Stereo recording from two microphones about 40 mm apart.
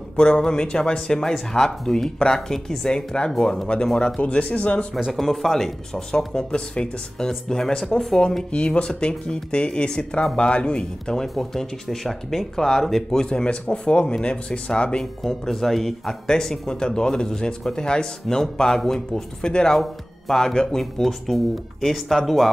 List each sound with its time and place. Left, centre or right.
0.1 s speech: left
4.2 s speech: left
5.1 s speech: centre
8.5 s speech: left
11.1 s speech: centre
13.1 s speech: left
15.2 s speech: centre
18.4 s speech: centre